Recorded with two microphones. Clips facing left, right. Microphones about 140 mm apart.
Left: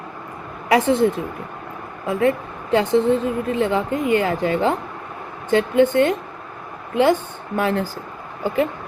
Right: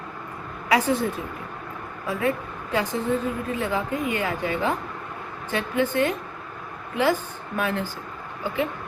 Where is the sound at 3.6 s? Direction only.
30° left (ahead or behind).